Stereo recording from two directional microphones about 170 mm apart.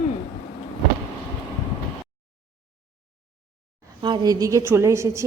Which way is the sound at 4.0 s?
25° right (ahead or behind).